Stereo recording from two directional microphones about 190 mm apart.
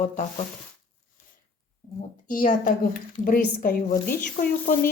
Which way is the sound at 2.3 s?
45° left (ahead or behind).